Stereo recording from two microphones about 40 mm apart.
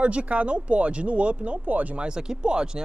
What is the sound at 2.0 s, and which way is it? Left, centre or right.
Speech, right.